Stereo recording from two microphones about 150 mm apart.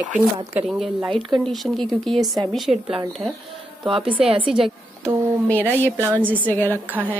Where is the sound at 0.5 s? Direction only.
Centre (ahead or behind).